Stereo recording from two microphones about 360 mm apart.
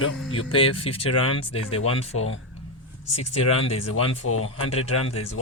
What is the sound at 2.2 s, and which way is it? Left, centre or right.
Speech, left.